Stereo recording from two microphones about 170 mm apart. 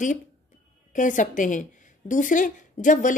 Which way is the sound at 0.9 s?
50° left (ahead or behind).